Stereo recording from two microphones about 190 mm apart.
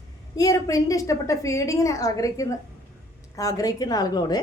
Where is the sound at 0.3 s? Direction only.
20° left (ahead or behind).